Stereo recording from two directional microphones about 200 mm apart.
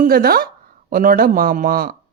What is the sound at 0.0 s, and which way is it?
Speech, 50° right (ahead or behind).